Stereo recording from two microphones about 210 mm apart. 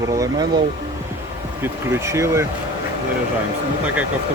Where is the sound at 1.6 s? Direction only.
10° right (ahead or behind).